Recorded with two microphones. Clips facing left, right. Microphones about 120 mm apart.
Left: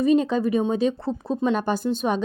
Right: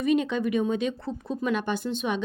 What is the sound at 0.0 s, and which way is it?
Speech, 35° left (ahead or behind).